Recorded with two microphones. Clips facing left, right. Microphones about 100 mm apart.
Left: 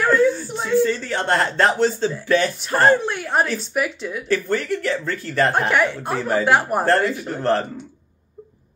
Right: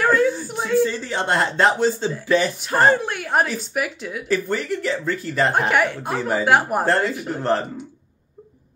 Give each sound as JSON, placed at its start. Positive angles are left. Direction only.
{"t": 0.0, "sound": "whimper", "side_deg": -10}
{"t": 0.8, "sound": "speech", "side_deg": -15}